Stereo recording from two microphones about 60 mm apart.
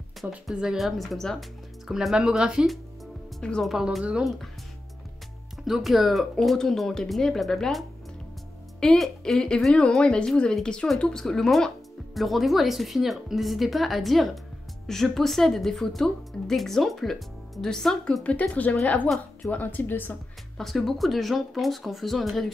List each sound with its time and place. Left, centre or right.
0.5 s speech: centre
1.9 s speech: centre
3.3 s speech: centre
4.2 s speech: centre
5.7 s speech: centre
8.9 s speech: centre
18.2 s speech: left
20.5 s speech: centre